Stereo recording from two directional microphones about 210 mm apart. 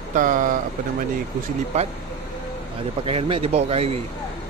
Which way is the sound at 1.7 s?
30° right (ahead or behind).